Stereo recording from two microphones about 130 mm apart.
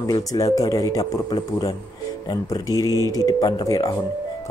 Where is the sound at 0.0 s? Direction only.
30° left (ahead or behind).